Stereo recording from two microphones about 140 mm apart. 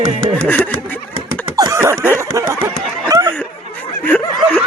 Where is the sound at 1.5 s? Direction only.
25° right (ahead or behind).